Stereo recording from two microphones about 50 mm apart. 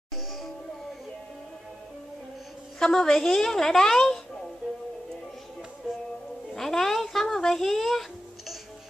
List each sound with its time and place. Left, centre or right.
2.8 s a woman's voice: centre
6.5 s music: centre